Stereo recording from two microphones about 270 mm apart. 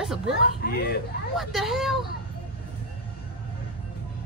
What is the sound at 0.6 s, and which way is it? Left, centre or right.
Speech, left.